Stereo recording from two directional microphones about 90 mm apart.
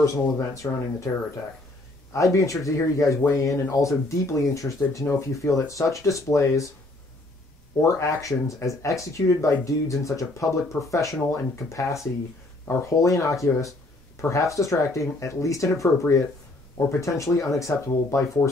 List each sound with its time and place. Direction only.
0.0 s speech: 35° left (ahead or behind)
2.1 s speech: 35° left (ahead or behind)
8.0 s speech: 35° left (ahead or behind)